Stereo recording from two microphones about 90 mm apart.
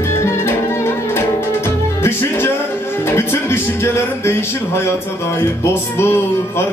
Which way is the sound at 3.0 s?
25° left (ahead or behind).